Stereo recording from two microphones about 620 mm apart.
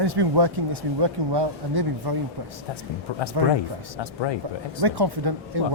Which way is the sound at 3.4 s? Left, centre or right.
Right.